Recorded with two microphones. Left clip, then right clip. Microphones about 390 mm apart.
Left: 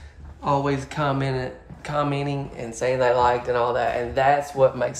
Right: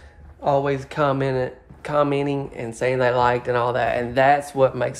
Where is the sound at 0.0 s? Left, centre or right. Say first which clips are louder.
Right 4 dB; centre.